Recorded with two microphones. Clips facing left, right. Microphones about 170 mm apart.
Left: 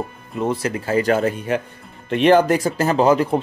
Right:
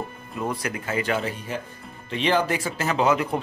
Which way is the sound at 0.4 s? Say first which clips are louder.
Left 7 dB; 30° left (ahead or behind).